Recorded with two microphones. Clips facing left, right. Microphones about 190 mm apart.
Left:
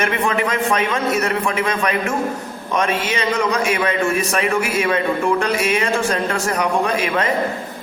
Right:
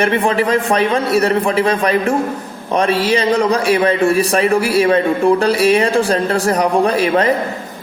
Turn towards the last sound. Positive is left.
turn(degrees=-35)  # may be behind; listen again after turning